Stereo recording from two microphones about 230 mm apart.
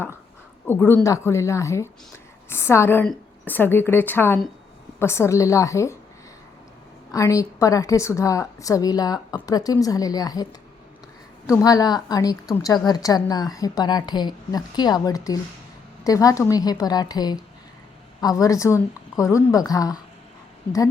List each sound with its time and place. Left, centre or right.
0.7 s a woman's voice: centre
7.1 s a woman's voice: centre